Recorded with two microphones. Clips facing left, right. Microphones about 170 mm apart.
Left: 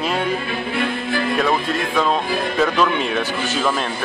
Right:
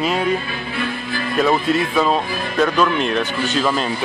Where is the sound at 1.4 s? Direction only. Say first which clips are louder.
Right 8 dB; 5° right (ahead or behind).